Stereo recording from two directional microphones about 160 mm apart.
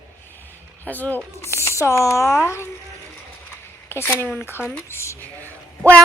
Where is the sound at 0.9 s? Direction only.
10° left (ahead or behind).